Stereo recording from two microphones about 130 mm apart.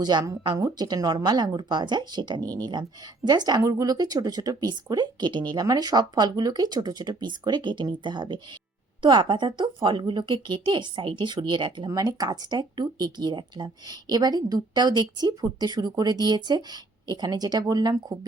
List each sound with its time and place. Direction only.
0.0 s speech: 35° right (ahead or behind)